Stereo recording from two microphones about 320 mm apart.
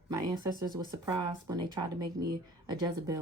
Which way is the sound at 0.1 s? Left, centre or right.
Centre.